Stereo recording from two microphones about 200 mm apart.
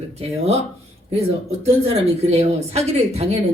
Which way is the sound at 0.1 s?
30° right (ahead or behind).